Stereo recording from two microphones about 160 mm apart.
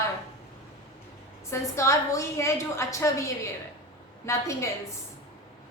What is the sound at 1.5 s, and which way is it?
A woman's voice, 20° left (ahead or behind).